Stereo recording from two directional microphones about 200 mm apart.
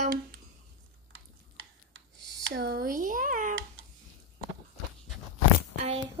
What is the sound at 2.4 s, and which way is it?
Speech, 55° right (ahead or behind).